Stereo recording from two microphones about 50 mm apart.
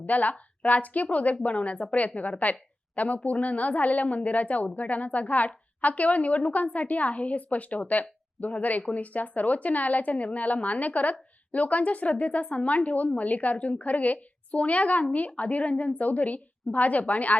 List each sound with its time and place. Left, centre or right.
0.0 s a woman's voice: left